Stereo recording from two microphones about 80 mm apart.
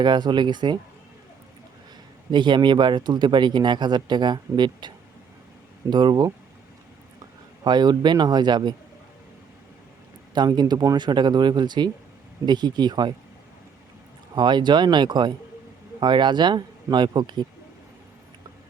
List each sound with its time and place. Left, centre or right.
0.0 s speech: right
2.3 s speech: right
5.9 s speech: right
7.6 s speech: right
10.3 s speech: right
14.3 s speech: right